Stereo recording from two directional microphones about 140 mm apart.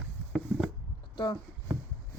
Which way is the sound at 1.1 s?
35° left (ahead or behind).